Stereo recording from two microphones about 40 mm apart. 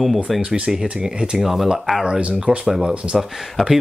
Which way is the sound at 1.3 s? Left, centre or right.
Centre.